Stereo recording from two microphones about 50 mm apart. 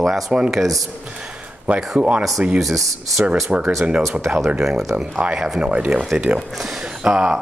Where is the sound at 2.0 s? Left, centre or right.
Right.